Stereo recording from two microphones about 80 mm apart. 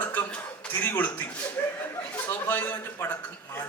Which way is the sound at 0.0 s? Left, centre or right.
Centre.